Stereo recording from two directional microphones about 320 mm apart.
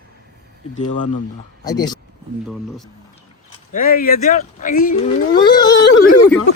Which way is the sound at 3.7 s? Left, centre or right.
Left.